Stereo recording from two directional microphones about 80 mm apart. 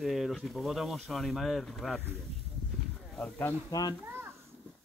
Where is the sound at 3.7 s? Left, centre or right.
Left.